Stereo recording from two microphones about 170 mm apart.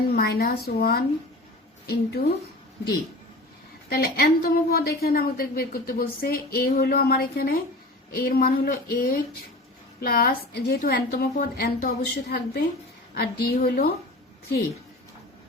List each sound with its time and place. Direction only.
0.2 s speech: 70° left (ahead or behind)
1.9 s speech: 75° left (ahead or behind)
3.8 s a woman's voice: 60° left (ahead or behind)